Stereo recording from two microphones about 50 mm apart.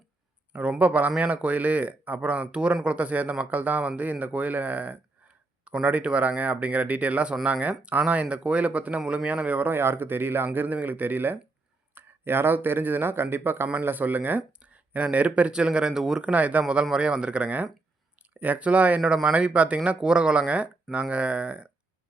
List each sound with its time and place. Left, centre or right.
0.5 s speech: right
9.7 s speech: right; by 16.2 s centre
16.2 s speech: right